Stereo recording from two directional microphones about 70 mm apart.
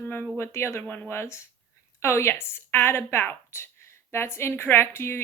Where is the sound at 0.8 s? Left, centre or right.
Centre.